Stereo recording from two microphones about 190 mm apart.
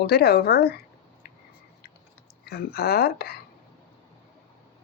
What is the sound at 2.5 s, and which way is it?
Speech, 55° left (ahead or behind).